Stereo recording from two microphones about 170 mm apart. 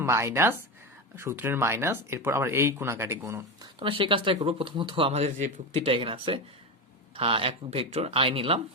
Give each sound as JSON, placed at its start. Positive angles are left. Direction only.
{"t": 0.0, "sound": "speech", "side_deg": -15}
{"t": 3.8, "sound": "speech", "side_deg": -30}